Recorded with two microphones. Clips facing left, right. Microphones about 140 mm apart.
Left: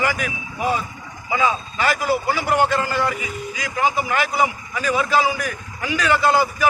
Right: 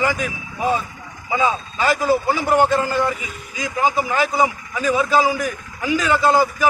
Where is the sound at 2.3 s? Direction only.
20° right (ahead or behind).